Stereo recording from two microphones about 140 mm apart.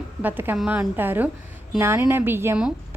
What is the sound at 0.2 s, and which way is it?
A woman's voice, 15° right (ahead or behind).